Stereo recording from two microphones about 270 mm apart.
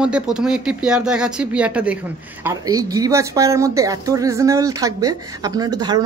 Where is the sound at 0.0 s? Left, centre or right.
Centre.